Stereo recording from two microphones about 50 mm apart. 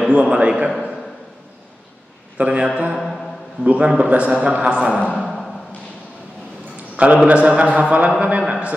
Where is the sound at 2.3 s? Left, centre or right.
Right.